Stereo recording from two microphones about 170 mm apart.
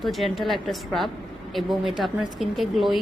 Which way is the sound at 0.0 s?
Centre (ahead or behind).